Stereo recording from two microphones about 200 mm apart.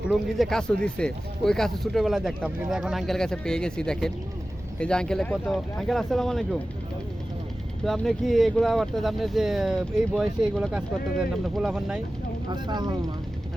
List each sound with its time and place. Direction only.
0.1 s speech: centre (ahead or behind)
7.9 s speech: centre (ahead or behind)
12.5 s speech: 20° right (ahead or behind)